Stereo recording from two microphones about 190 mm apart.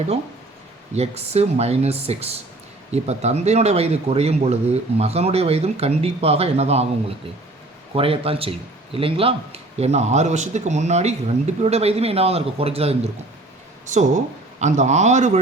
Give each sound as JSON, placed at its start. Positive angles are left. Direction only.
{"t": 0.9, "sound": "speech", "side_deg": -35}
{"t": 7.9, "sound": "speech", "side_deg": -30}